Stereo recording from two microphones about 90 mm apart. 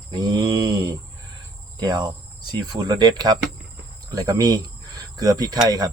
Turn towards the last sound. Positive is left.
turn(degrees=-45)  # may be behind; listen again after turning